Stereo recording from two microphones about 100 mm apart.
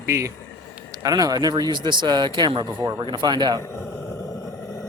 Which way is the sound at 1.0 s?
40° right (ahead or behind).